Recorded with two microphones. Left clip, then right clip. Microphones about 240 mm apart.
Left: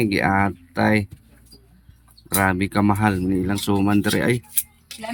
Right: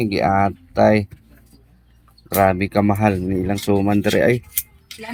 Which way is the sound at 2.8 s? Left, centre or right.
Left.